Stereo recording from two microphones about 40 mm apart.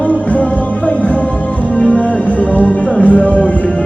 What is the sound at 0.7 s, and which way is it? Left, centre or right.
Music, left.